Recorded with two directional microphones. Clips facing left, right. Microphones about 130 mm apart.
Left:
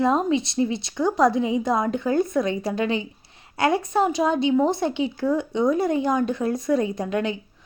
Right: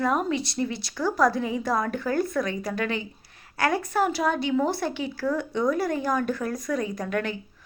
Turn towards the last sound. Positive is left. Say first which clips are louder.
# left 3 dB
turn(degrees=20)  # may be behind; listen again after turning